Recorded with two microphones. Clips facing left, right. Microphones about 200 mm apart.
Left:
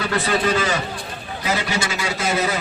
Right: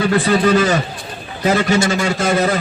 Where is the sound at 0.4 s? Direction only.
45° right (ahead or behind).